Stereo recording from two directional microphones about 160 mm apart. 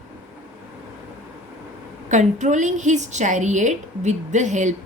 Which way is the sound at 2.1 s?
50° right (ahead or behind).